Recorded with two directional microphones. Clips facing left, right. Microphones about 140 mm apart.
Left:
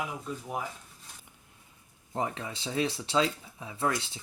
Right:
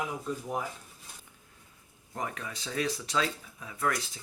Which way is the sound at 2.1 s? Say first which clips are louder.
Left 4 dB; 25° left (ahead or behind).